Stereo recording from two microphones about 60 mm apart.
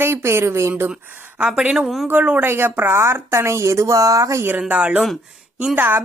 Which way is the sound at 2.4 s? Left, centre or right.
Right.